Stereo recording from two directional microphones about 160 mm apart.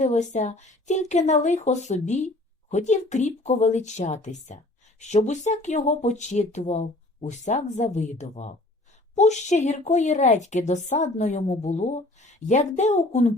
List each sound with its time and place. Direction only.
0.0 s a woman's voice: 50° left (ahead or behind)